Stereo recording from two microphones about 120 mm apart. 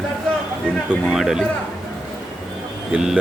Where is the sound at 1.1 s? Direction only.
5° right (ahead or behind).